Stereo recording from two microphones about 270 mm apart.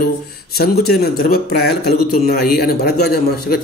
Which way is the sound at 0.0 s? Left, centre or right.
Left.